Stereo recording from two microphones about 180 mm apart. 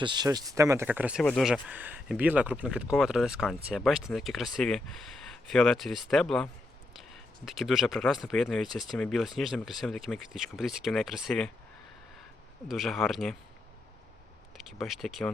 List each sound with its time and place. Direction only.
0.0 s speech: 25° right (ahead or behind); by 1.2 s 10° right (ahead or behind)
1.2 s speech: 5° left (ahead or behind)
1.6 s speech: 10° right (ahead or behind)
12.6 s speech: centre (ahead or behind)
14.7 s speech: centre (ahead or behind)